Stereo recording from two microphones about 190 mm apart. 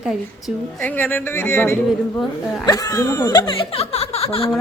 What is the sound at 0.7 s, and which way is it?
Speech, 10° left (ahead or behind).